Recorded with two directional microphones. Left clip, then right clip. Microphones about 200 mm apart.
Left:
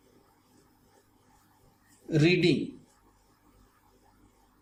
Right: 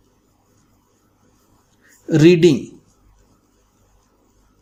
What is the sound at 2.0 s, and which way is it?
Speech, 60° right (ahead or behind).